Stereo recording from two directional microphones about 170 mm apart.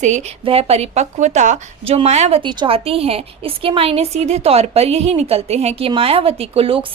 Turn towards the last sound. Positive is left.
turn(degrees=-35)  # may be behind; listen again after turning